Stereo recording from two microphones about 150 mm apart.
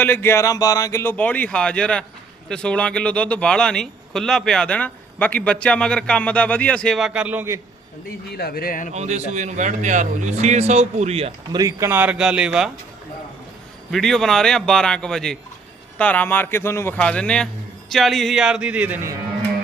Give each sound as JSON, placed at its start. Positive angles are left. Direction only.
{"t": 0.0, "sound": "a man's voice", "side_deg": 15}
{"t": 8.3, "sound": "speech", "side_deg": 90}
{"t": 8.9, "sound": "speech", "side_deg": -50}
{"t": 11.5, "sound": "speech", "side_deg": -20}
{"t": 13.9, "sound": "a man's voice", "side_deg": 0}